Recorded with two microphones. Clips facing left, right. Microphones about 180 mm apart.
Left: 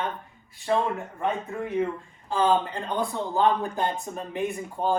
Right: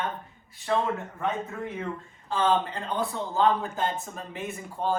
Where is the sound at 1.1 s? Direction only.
15° left (ahead or behind).